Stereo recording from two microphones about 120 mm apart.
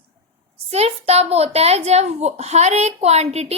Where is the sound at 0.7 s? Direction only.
60° right (ahead or behind).